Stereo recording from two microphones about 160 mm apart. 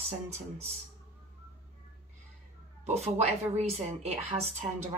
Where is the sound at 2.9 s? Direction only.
40° right (ahead or behind).